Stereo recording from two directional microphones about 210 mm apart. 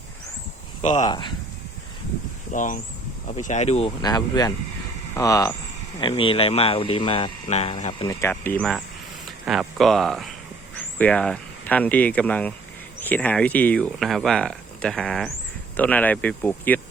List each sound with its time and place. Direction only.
0.8 s speech: 35° left (ahead or behind)
1.0 s speech: 20° left (ahead or behind)
2.5 s speech: 40° left (ahead or behind)
8.0 s speech: 10° left (ahead or behind)